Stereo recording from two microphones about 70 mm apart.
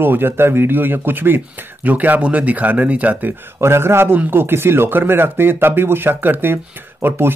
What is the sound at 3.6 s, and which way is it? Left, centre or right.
A man's voice, right.